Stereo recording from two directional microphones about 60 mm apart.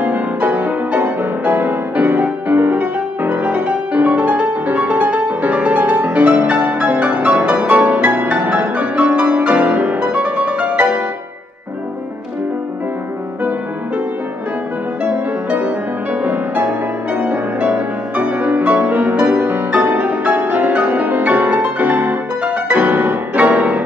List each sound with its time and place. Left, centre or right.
0.0 s music: right
13.4 s music: right
15.5 s music: right